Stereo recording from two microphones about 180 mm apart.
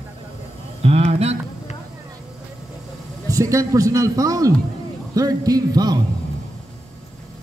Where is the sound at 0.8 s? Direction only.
35° right (ahead or behind).